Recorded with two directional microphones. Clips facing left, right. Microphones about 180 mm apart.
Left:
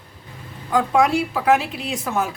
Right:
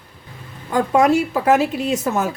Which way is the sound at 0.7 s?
45° right (ahead or behind).